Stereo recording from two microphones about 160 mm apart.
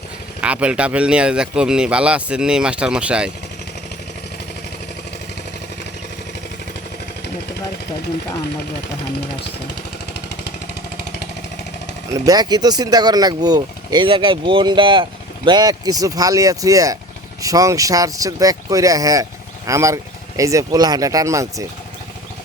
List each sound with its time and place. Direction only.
0.4 s speech: 5° right (ahead or behind)
12.1 s speech: 20° right (ahead or behind)